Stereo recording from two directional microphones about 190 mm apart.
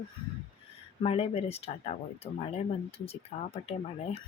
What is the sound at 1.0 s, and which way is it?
Speech, 30° left (ahead or behind).